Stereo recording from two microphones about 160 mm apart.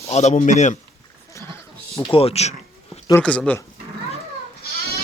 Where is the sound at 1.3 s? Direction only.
20° left (ahead or behind).